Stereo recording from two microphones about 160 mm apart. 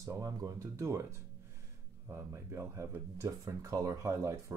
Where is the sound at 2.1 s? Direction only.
15° right (ahead or behind).